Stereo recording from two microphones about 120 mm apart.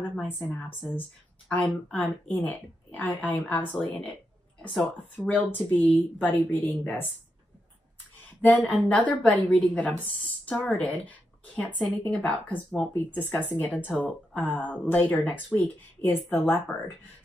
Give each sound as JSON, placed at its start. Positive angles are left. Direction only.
{"t": 0.1, "sound": "speech", "side_deg": 15}
{"t": 8.6, "sound": "speech", "side_deg": 10}